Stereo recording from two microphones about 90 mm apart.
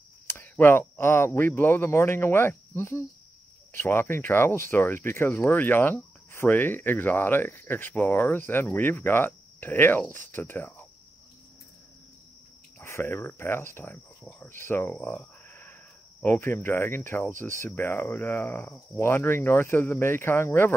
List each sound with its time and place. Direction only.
0.3 s speech: 25° left (ahead or behind)
12.8 s speech: 25° left (ahead or behind)